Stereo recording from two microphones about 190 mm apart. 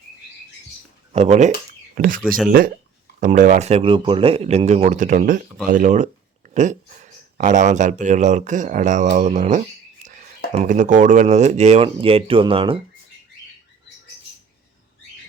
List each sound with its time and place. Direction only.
1.1 s speech: 35° right (ahead or behind)
2.0 s speech: 45° right (ahead or behind); by 12.8 s 30° right (ahead or behind)